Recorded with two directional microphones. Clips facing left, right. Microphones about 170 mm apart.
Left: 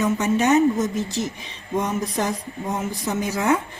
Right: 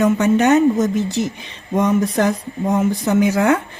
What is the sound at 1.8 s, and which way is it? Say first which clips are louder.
Speech: right 8 dB; 65° right (ahead or behind).